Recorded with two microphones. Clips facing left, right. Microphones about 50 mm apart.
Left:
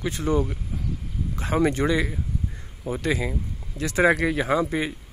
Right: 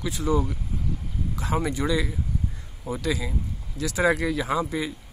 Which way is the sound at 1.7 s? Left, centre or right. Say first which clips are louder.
Left 2 dB; left.